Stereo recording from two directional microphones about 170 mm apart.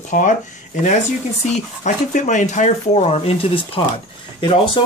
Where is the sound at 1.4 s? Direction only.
45° left (ahead or behind).